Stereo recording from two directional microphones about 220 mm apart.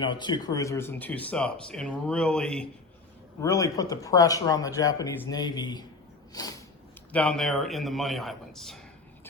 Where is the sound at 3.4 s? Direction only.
15° left (ahead or behind).